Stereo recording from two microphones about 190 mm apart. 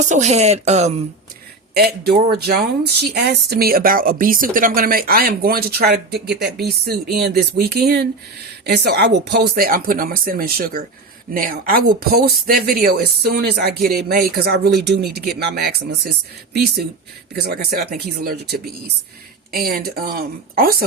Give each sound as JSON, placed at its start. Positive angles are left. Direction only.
{"t": 0.0, "sound": "speech", "side_deg": -40}
{"t": 1.7, "sound": "speech", "side_deg": -55}